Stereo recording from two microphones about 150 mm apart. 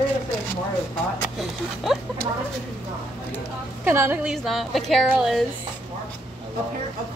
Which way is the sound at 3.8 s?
15° right (ahead or behind).